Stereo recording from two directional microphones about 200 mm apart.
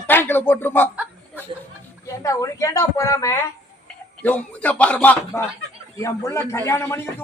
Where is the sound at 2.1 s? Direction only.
15° left (ahead or behind).